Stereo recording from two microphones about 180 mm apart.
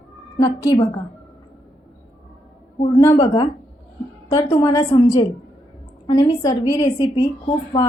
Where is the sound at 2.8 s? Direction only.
20° left (ahead or behind).